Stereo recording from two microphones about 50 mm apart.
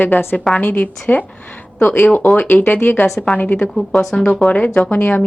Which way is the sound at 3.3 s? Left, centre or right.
Left.